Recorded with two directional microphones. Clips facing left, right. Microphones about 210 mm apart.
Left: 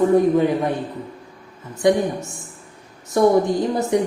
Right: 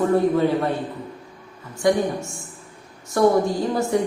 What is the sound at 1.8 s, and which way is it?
A woman's voice, 20° left (ahead or behind).